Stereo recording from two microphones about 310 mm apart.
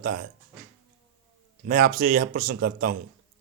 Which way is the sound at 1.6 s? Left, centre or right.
Right.